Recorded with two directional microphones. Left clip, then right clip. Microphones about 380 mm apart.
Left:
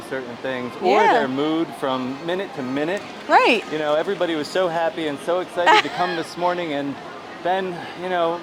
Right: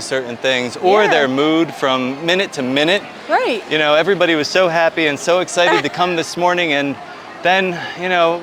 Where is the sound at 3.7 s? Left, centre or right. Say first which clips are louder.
Right 8 dB; right.